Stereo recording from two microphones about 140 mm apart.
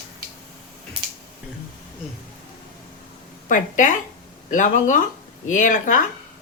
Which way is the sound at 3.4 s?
65° left (ahead or behind).